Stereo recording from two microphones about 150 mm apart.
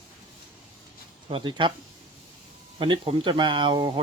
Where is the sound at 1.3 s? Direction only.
35° right (ahead or behind).